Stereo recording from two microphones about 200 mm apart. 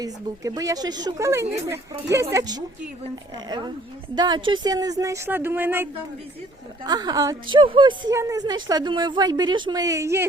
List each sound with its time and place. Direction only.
0.0 s a woman's voice: 15° right (ahead or behind)